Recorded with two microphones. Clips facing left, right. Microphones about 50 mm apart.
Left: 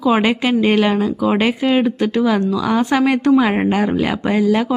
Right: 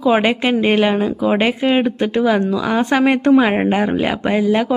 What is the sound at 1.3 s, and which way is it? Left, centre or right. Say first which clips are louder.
A woman's voice: right 1 dB; centre.